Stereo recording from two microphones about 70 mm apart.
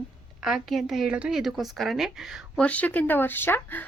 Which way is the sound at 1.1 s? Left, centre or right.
Centre.